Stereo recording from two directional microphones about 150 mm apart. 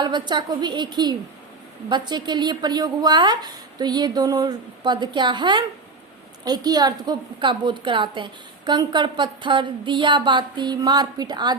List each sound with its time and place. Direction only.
0.0 s a woman's voice: 30° right (ahead or behind)